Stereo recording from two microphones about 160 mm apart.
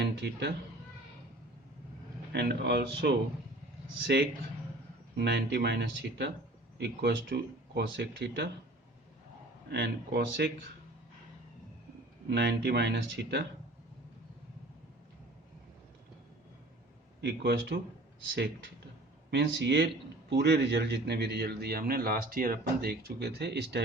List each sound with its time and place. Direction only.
0.0 s cat: 90° right
2.3 s a man's voice: 90° right
5.1 s a man's voice: 90° right
9.6 s a man's voice: 90° right
12.3 s a man's voice: 90° right
17.2 s a man's voice: 90° right
19.3 s a man's voice: 90° right